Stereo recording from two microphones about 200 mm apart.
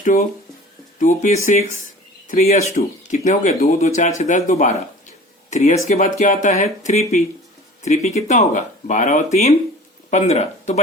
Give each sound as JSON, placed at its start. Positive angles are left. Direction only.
{"t": 0.0, "sound": "speech", "side_deg": 45}